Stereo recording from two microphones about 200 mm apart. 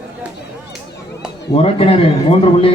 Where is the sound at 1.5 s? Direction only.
30° left (ahead or behind).